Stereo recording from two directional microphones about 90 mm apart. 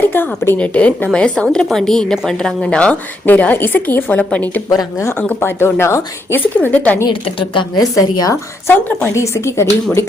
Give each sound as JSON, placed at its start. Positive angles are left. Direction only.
{"t": 0.0, "sound": "a woman's voice", "side_deg": 25}
{"t": 4.7, "sound": "speech", "side_deg": 45}
{"t": 5.4, "sound": "a woman's voice", "side_deg": 25}
{"t": 7.1, "sound": "a woman's voice", "side_deg": 75}
{"t": 7.8, "sound": "speech", "side_deg": 40}
{"t": 8.6, "sound": "speech", "side_deg": 20}
{"t": 9.1, "sound": "speech", "side_deg": 30}